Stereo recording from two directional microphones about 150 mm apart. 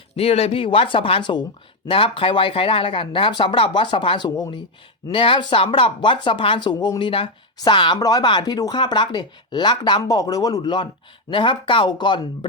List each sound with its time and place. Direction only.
0.2 s speech: 40° left (ahead or behind)